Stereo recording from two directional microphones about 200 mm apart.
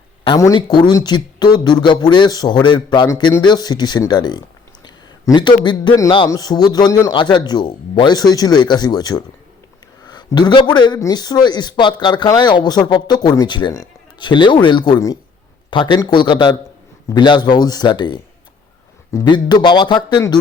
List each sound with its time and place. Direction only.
0.3 s speech: 20° left (ahead or behind)